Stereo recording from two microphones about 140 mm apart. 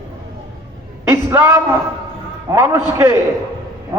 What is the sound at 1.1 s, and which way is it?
A woman's voice, 15° right (ahead or behind).